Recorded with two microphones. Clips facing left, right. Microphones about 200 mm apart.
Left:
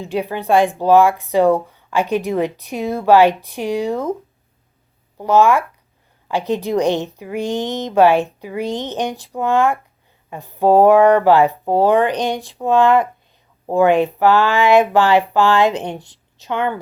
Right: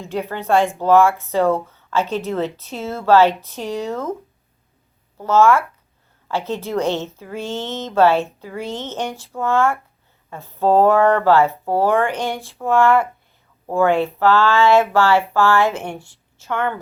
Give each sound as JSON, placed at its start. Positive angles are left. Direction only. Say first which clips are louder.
{"t": 0.0, "sound": "a woman's voice", "louder": "left 3 dB", "side_deg": 15}
{"t": 5.1, "sound": "a woman's voice", "louder": "left 1 dB", "side_deg": 15}